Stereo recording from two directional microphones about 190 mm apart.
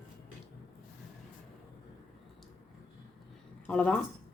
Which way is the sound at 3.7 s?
5° left (ahead or behind).